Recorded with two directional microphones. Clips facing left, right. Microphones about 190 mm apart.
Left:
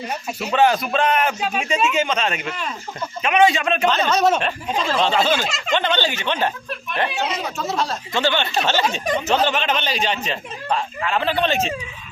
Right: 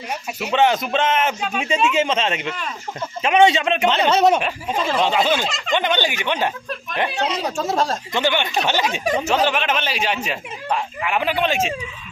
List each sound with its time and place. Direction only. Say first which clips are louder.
0.5 s speech: even; 20° right (ahead or behind)
4.3 s speech: right 1 dB; 10° right (ahead or behind)
5.5 s speech: even; centre (ahead or behind)
5.7 s speech: even; 15° right (ahead or behind)
7.3 s speech: right 3 dB; 40° right (ahead or behind)
8.1 s speech: left 2 dB; 15° right (ahead or behind)